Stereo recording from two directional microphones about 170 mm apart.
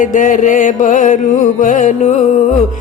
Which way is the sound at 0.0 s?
50° left (ahead or behind).